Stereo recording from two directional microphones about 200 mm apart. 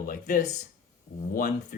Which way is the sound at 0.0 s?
45° left (ahead or behind).